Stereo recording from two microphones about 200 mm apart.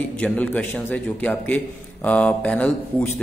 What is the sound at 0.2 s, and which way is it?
A man's voice, 5° left (ahead or behind).